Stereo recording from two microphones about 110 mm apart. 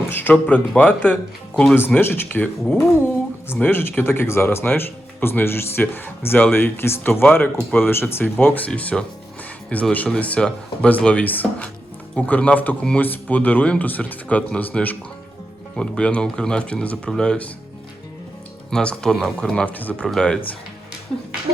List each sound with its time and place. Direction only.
0.1 s a man's voice: 15° left (ahead or behind)
18.7 s a man's voice: 5° left (ahead or behind)